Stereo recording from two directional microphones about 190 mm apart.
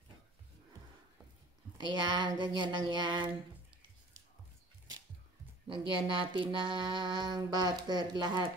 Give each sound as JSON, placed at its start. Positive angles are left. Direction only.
{"t": 1.9, "sound": "mantra", "side_deg": -25}
{"t": 5.7, "sound": "mantra", "side_deg": -25}